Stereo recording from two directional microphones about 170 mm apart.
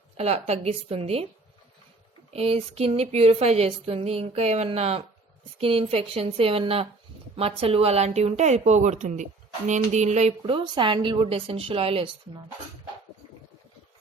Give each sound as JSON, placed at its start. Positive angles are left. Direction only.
{"t": 0.2, "sound": "speech", "side_deg": -40}
{"t": 2.3, "sound": "speech", "side_deg": -35}